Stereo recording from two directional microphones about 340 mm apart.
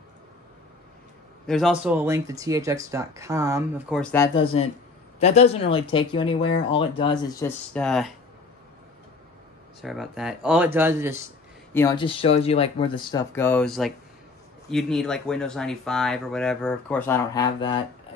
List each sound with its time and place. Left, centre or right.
1.5 s speech: centre
9.8 s speech: centre
11.7 s speech: centre